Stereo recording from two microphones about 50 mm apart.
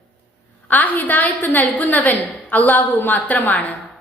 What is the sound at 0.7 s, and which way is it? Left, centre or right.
A woman's voice, left.